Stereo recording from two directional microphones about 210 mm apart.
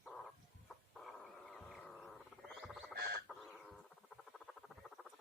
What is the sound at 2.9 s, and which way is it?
Bird, 50° right (ahead or behind).